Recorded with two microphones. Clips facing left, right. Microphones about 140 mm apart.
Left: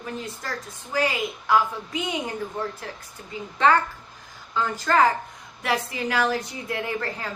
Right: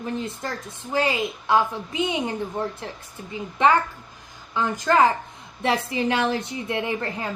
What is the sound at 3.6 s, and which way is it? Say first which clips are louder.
A woman's voice: right 1 dB; 15° right (ahead or behind).